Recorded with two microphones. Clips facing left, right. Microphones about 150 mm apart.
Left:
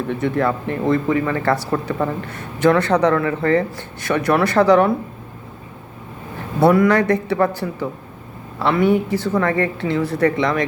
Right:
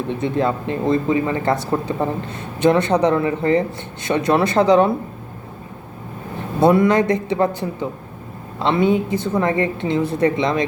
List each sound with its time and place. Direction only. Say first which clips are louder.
0.1 s speech: even; 20° right (ahead or behind)
6.6 s speech: even; 20° right (ahead or behind)